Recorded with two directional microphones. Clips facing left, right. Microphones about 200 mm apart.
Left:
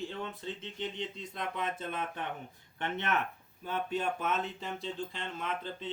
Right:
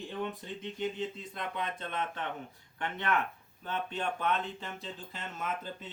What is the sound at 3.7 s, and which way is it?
Speech, 5° left (ahead or behind).